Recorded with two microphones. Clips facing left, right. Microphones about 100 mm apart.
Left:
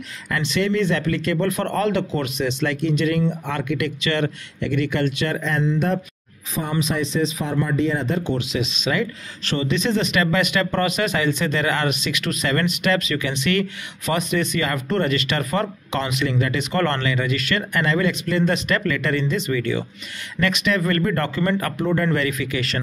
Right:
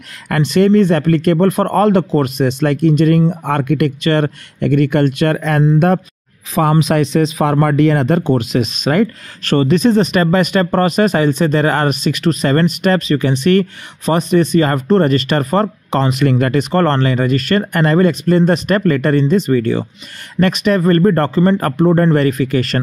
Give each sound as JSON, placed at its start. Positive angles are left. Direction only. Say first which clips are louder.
{"t": 0.3, "sound": "speech", "louder": "right 10 dB", "side_deg": -50}
{"t": 6.5, "sound": "speech", "louder": "right 10 dB", "side_deg": -70}
{"t": 16.7, "sound": "speech", "louder": "right 6 dB", "side_deg": -35}